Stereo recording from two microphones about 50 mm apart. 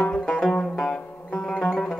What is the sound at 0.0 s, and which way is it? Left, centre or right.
Banjo, centre.